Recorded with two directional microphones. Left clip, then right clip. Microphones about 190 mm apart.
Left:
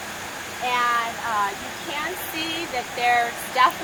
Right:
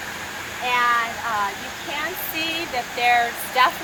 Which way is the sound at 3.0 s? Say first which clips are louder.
Right 2 dB; 35° right (ahead or behind).